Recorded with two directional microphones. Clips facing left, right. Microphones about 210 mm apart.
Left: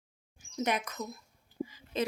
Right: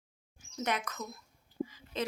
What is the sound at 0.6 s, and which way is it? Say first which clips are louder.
Speech: left 3 dB; 15° left (ahead or behind).